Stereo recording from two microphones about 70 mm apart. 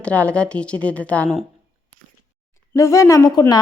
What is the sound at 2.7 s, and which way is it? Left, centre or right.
Speech, left.